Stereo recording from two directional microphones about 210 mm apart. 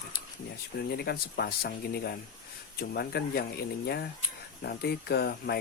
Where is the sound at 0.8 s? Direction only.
50° left (ahead or behind).